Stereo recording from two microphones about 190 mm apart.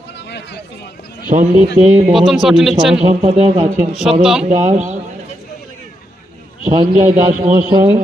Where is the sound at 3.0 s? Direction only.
35° right (ahead or behind).